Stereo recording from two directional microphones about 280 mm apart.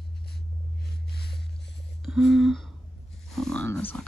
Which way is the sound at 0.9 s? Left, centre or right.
Left.